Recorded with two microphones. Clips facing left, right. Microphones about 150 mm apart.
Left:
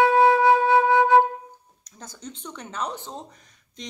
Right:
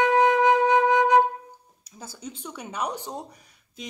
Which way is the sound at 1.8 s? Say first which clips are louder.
Right 1 dB; 10° right (ahead or behind).